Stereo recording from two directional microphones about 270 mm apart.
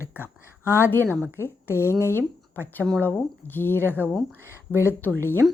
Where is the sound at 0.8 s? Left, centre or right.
Centre.